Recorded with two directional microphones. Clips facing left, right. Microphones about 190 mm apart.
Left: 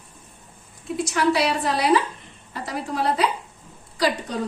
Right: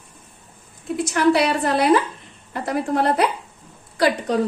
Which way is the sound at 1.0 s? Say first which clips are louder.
Right 4 dB; 55° right (ahead or behind).